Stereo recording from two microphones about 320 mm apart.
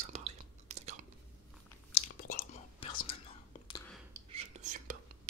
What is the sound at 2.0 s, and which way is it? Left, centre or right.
Whispering, left.